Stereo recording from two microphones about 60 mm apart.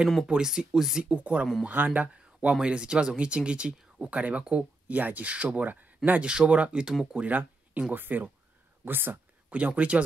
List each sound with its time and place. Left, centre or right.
0.3 s speech: centre
7.2 s speech: right
9.5 s speech: right